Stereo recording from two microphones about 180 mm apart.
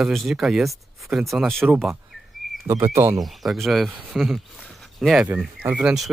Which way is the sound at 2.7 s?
15° right (ahead or behind).